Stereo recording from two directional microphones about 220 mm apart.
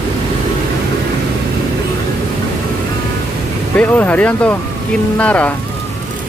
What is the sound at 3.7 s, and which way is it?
Speech, 5° left (ahead or behind).